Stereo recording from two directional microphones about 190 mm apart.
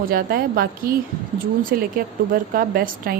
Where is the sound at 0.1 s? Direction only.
50° right (ahead or behind).